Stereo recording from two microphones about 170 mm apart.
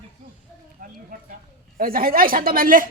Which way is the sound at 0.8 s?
55° right (ahead or behind).